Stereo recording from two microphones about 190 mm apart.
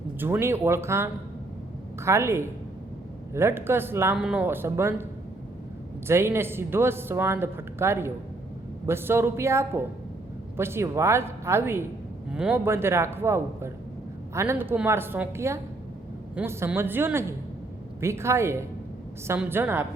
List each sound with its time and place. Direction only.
0.2 s a man's voice: 10° right (ahead or behind)
6.1 s a man's voice: 15° right (ahead or behind)